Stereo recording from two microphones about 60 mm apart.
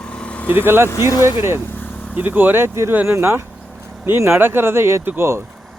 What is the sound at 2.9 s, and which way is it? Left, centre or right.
Speech, right.